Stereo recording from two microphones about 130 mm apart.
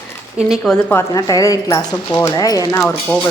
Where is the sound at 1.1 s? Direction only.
25° left (ahead or behind).